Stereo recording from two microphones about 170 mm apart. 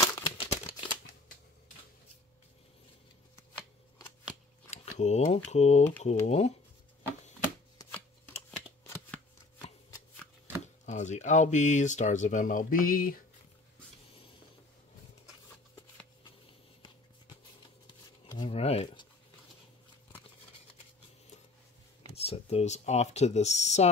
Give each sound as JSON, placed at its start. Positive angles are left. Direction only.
{"t": 0.0, "sound": "crumpling", "side_deg": 20}
{"t": 4.6, "sound": "speech", "side_deg": 40}
{"t": 8.5, "sound": "shuffling cards", "side_deg": 10}
{"t": 10.9, "sound": "speech", "side_deg": 45}
{"t": 17.8, "sound": "shuffling cards", "side_deg": 30}
{"t": 18.4, "sound": "a sound", "side_deg": 35}
{"t": 22.1, "sound": "speech", "side_deg": 35}